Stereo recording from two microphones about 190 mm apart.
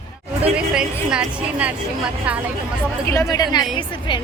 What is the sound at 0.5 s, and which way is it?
A woman's voice, 5° right (ahead or behind).